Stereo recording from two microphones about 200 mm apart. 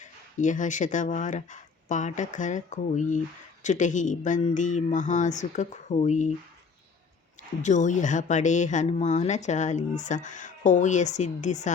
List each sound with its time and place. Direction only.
0.0 s speech: 40° left (ahead or behind)
7.6 s speech: 40° left (ahead or behind)